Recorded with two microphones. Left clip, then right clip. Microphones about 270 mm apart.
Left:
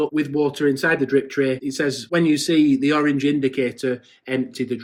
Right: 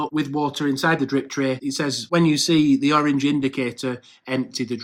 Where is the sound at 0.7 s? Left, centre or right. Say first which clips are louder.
Left 2 dB; right.